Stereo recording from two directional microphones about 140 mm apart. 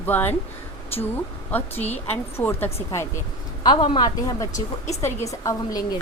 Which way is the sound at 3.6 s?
35° left (ahead or behind).